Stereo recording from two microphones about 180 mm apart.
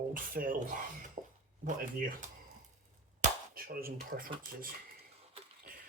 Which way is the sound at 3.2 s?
55° right (ahead or behind).